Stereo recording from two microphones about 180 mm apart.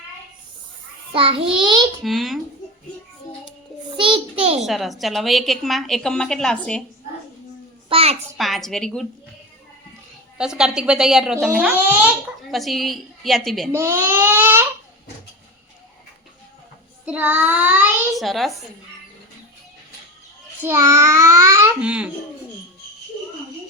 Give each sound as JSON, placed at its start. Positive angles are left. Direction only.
{"t": 1.1, "sound": "a child's voice", "side_deg": -30}
{"t": 2.0, "sound": "a woman's voice", "side_deg": 0}
{"t": 3.9, "sound": "a sound", "side_deg": -25}
{"t": 4.6, "sound": "a woman's voice", "side_deg": 0}
{"t": 7.9, "sound": "a sound", "side_deg": -30}
{"t": 8.4, "sound": "a woman's voice", "side_deg": 0}
{"t": 10.3, "sound": "a woman's voice", "side_deg": -5}
{"t": 13.7, "sound": "babbling", "side_deg": -15}
{"t": 17.1, "sound": "a child's voice", "side_deg": -10}
{"t": 18.1, "sound": "a child's voice", "side_deg": 0}
{"t": 20.6, "sound": "a child's voice", "side_deg": -15}